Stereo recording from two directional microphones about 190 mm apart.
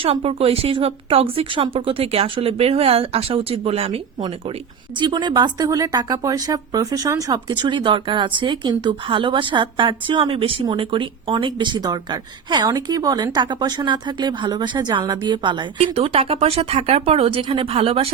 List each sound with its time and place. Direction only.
0.0 s speech: 30° right (ahead or behind)